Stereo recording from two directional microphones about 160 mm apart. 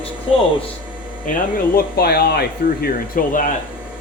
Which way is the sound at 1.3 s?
55° left (ahead or behind).